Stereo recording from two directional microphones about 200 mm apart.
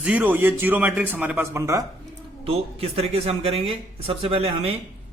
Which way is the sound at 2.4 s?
30° right (ahead or behind).